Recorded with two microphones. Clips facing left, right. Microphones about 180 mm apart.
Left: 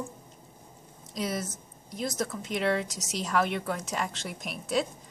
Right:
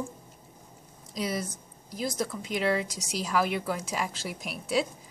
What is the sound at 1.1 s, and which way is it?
Speech, centre (ahead or behind).